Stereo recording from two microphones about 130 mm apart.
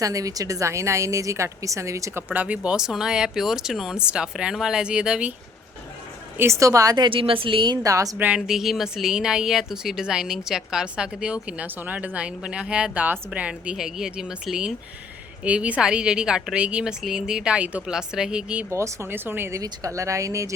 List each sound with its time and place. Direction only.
0.0 s a woman's voice: 25° right (ahead or behind); by 5.3 s 5° right (ahead or behind)
6.3 s a woman's voice: 20° right (ahead or behind); by 7.8 s 40° right (ahead or behind)
7.9 s speech: 25° right (ahead or behind)
8.2 s a woman's voice: 5° right (ahead or behind)
18.7 s speech: 20° right (ahead or behind)